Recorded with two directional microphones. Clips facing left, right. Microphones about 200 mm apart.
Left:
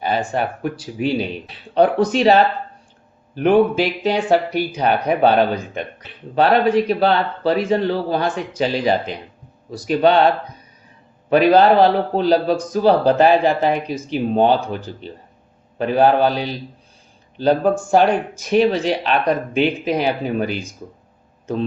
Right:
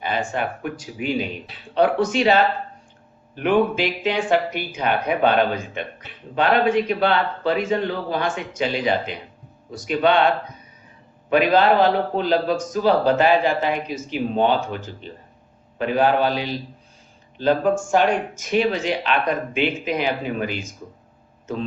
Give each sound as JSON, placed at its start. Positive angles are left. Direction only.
{"t": 0.0, "sound": "a man's voice", "side_deg": 35}